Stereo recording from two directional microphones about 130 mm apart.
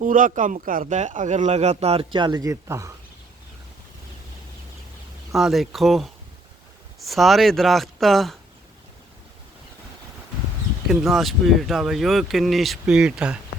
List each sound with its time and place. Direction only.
0.0 s speech: 85° right; by 2.9 s 25° right (ahead or behind)
5.3 s speech: centre (ahead or behind)
10.8 s speech: centre (ahead or behind)